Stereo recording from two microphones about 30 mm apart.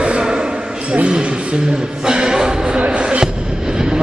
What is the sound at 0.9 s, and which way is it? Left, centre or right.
Speech, right.